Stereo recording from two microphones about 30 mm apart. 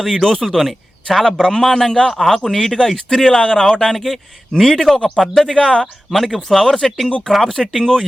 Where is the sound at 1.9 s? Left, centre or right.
Left.